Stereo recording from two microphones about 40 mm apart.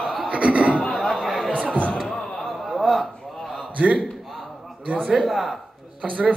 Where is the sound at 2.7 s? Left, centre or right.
Centre.